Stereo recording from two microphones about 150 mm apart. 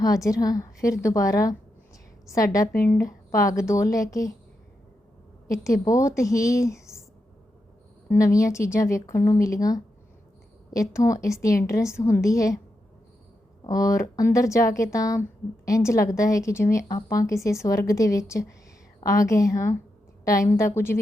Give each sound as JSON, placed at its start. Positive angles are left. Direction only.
{"t": 0.0, "sound": "a woman's voice", "side_deg": 20}
{"t": 5.5, "sound": "a woman's voice", "side_deg": 20}
{"t": 8.1, "sound": "a woman's voice", "side_deg": 20}
{"t": 13.7, "sound": "a woman's voice", "side_deg": 20}